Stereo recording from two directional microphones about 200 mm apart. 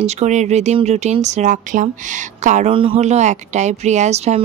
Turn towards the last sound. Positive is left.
turn(degrees=-35)  # may be behind; listen again after turning